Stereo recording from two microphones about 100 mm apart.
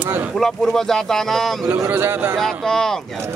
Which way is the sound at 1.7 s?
20° right (ahead or behind).